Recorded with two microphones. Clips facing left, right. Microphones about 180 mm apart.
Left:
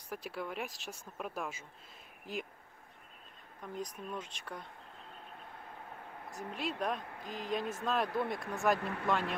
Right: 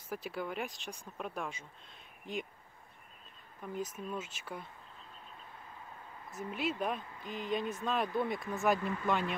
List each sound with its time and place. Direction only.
0.1 s speech: centre (ahead or behind)
3.7 s speech: 5° right (ahead or behind)
5.9 s a sound: 60° left (ahead or behind)
6.5 s speech: centre (ahead or behind)
7.0 s speech: 65° left (ahead or behind)
7.2 s speech: centre (ahead or behind)
8.7 s speech: 65° left (ahead or behind)